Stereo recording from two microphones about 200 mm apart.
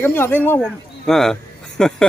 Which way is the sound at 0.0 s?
10° left (ahead or behind).